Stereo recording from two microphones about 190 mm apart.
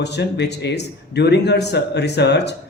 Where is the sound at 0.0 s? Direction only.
60° left (ahead or behind).